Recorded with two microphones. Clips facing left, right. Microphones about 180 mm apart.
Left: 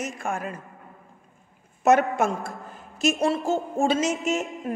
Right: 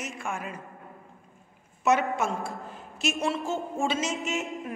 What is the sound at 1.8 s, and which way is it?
A woman's voice, 45° left (ahead or behind).